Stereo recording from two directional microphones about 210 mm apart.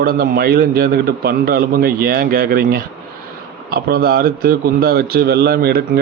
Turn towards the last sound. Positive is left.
turn(degrees=-45)  # may be behind; listen again after turning